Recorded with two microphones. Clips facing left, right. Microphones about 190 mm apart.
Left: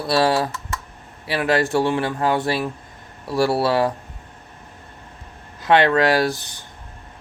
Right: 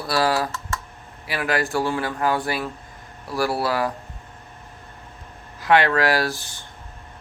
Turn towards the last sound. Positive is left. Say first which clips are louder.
# left 4 dB
turn(degrees=20)  # may be behind; listen again after turning